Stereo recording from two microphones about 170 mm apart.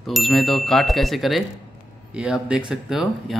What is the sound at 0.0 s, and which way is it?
Speech, centre (ahead or behind).